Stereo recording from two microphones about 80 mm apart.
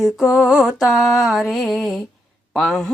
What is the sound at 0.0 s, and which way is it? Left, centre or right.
Mantra, centre.